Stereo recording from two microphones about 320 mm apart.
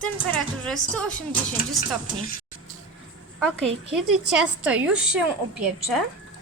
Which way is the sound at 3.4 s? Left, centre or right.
Centre.